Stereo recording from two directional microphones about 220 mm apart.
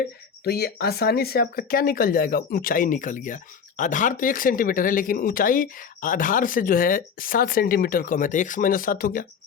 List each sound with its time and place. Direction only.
0.4 s speech: 45° left (ahead or behind)